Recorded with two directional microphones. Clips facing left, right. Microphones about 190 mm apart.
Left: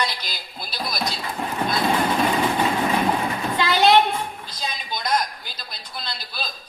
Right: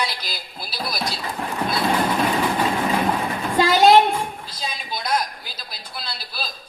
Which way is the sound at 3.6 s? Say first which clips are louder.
Right 4 dB; 45° right (ahead or behind).